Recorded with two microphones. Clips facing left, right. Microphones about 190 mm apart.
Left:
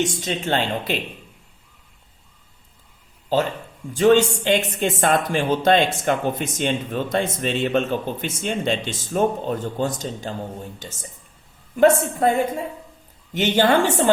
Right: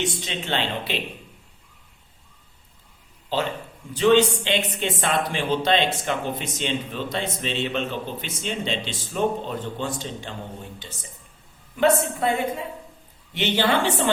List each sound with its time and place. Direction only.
0.0 s speech: 45° left (ahead or behind)
3.3 s speech: 45° left (ahead or behind)